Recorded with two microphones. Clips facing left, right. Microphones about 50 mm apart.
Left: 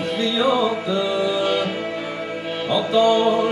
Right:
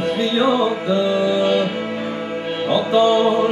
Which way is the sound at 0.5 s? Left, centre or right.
Centre.